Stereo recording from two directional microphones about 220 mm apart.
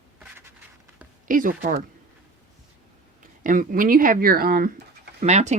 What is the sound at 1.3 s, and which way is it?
Speech, 40° right (ahead or behind).